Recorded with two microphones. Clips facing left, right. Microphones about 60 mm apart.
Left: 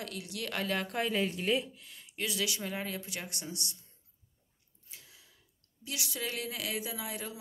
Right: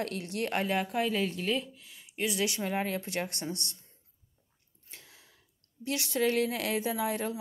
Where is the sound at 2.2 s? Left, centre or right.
Right.